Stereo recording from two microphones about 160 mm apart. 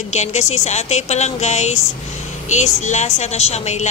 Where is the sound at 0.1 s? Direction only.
45° left (ahead or behind).